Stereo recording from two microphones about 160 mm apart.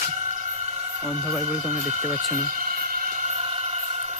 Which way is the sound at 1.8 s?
50° right (ahead or behind).